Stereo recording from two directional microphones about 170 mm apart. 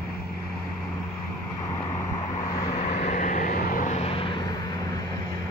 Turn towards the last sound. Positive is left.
turn(degrees=35)  # may be behind; listen again after turning